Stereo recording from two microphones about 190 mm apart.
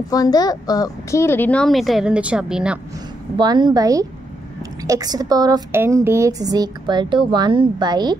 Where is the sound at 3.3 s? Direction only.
25° right (ahead or behind).